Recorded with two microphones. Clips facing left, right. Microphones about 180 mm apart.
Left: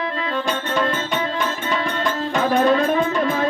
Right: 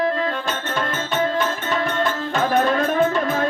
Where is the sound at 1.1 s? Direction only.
45° right (ahead or behind).